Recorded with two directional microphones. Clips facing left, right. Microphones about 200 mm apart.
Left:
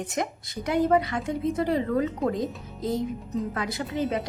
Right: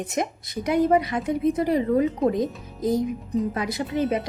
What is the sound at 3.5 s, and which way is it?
Speech, 20° right (ahead or behind).